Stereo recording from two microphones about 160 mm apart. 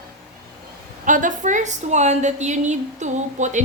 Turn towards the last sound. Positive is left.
turn(degrees=-50)  # may be behind; listen again after turning